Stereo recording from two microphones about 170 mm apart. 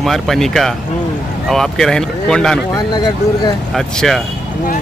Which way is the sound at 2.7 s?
25° left (ahead or behind).